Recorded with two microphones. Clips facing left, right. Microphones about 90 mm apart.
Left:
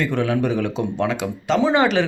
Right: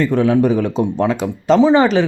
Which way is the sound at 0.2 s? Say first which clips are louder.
Right 7 dB; 30° right (ahead or behind).